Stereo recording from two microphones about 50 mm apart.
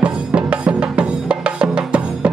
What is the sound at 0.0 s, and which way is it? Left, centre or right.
Music, right.